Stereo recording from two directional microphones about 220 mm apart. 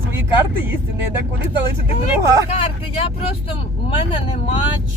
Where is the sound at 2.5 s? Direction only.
25° left (ahead or behind).